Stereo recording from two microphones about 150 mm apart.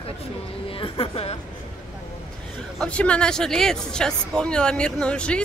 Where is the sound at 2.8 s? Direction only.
5° left (ahead or behind).